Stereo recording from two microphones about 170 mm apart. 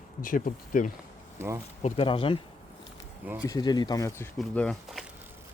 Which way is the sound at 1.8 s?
35° left (ahead or behind).